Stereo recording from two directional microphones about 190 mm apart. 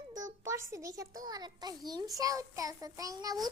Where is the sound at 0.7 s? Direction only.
15° right (ahead or behind).